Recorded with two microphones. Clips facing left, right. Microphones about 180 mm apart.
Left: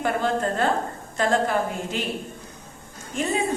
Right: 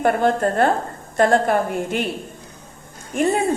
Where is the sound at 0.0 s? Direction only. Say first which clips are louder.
Right 6 dB; 55° right (ahead or behind).